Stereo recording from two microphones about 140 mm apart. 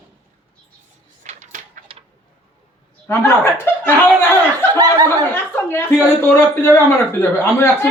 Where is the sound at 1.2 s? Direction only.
60° right (ahead or behind).